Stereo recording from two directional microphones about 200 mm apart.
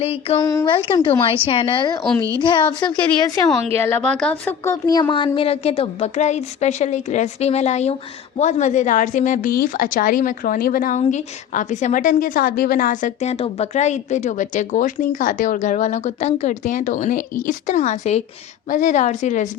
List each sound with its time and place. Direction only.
0.0 s speech: 30° left (ahead or behind)
0.3 s speech: 20° left (ahead or behind)
3.8 s a woman's voice: 10° left (ahead or behind); by 19.5 s 35° left (ahead or behind)